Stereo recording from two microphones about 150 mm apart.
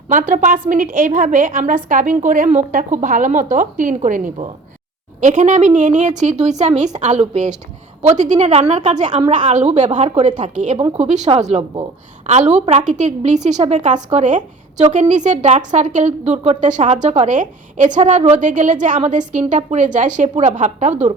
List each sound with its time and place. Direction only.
0.1 s a woman's voice: 60° right (ahead or behind)
10.8 s a woman's voice: 35° right (ahead or behind)